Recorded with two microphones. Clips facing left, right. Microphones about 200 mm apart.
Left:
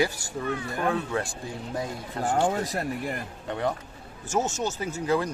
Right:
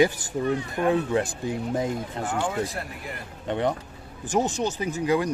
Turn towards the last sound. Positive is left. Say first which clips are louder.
# right 2 dB
turn(degrees=-15)  # may be behind; listen again after turning